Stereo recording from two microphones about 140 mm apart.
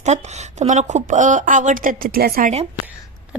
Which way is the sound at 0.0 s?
55° right (ahead or behind).